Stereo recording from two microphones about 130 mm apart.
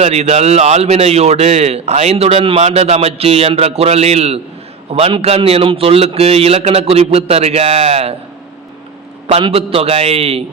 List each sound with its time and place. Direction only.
0.0 s a man's voice: 55° right (ahead or behind)
9.4 s a man's voice: 45° right (ahead or behind)